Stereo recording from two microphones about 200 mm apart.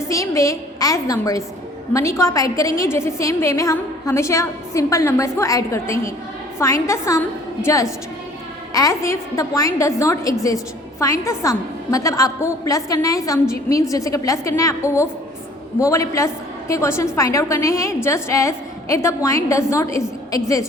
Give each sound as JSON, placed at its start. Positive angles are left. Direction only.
{"t": 0.1, "sound": "a woman's voice", "side_deg": 15}